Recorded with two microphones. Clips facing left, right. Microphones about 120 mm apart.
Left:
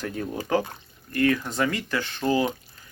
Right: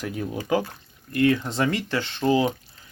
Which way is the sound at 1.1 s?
25° right (ahead or behind).